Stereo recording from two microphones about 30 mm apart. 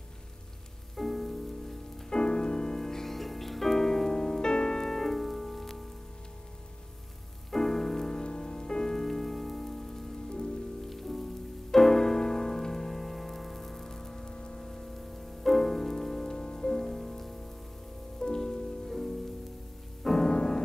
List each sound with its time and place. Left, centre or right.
0.9 s music: centre
2.0 s music: left
4.9 s music: centre
7.5 s music: centre
8.2 s music: left
8.9 s rain on surface: centre
11.7 s music: centre
14.2 s music: left
14.6 s music: centre
16.3 s rain on surface: centre
18.2 s rain on surface: left
18.9 s music: centre
20.2 s music: centre